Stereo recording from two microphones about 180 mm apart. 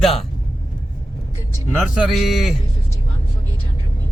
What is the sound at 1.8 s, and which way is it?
Speech, centre (ahead or behind).